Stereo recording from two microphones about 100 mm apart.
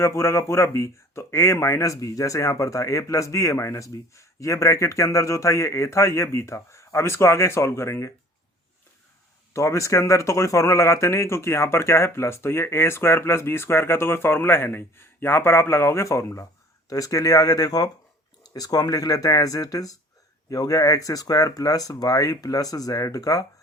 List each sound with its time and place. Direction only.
0.0 s speech: 30° left (ahead or behind)
9.5 s speech: 30° left (ahead or behind)